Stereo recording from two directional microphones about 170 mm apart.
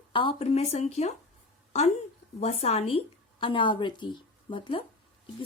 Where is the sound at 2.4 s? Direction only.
35° left (ahead or behind).